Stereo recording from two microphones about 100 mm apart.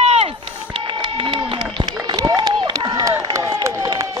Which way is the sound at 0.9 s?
55° right (ahead or behind).